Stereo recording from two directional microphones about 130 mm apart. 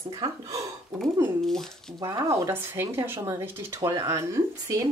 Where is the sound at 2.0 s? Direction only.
20° right (ahead or behind).